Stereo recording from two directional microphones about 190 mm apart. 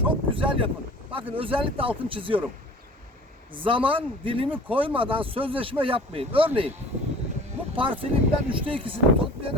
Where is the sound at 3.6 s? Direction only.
25° right (ahead or behind).